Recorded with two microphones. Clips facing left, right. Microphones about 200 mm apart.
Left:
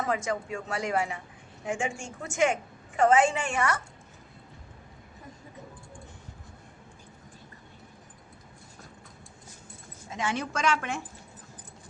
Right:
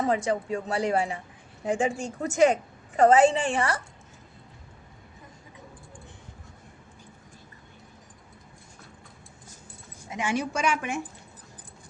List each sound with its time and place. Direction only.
0.0 s a woman's voice: 30° right (ahead or behind)
10.1 s a woman's voice: 15° right (ahead or behind)